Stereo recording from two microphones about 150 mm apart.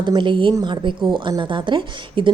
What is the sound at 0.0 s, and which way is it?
A woman's voice, 30° right (ahead or behind).